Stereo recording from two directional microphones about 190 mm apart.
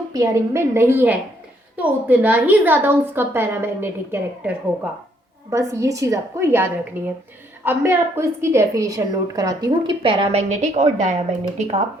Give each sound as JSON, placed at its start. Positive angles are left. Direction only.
{"t": 0.1, "sound": "a woman's voice", "side_deg": -15}